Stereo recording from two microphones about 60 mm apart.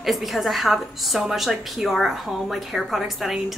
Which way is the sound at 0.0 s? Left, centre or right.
Centre.